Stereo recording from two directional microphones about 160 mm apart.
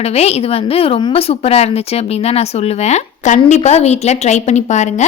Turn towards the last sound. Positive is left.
turn(degrees=45)  # may be behind; listen again after turning